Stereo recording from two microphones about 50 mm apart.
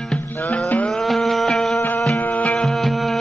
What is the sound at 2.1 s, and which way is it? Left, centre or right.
Music, left.